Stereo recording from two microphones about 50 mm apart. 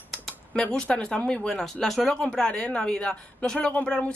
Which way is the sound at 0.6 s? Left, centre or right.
Left.